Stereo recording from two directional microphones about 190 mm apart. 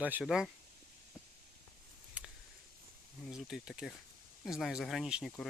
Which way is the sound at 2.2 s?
5° right (ahead or behind).